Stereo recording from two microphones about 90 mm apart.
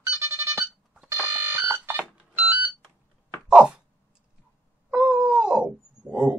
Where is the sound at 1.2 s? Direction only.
30° right (ahead or behind).